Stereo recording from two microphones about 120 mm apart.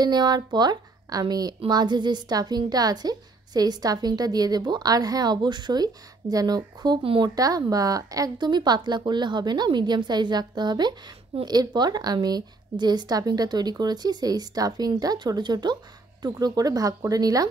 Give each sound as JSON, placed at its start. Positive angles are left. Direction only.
{"t": 0.0, "sound": "speech", "side_deg": -35}
{"t": 7.0, "sound": "speech", "side_deg": -50}
{"t": 7.2, "sound": "speech", "side_deg": -30}